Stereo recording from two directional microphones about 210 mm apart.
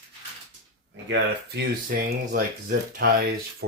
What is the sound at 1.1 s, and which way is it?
Speech, 50° right (ahead or behind).